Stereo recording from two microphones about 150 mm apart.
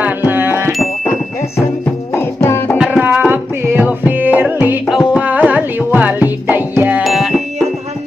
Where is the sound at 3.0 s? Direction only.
10° right (ahead or behind).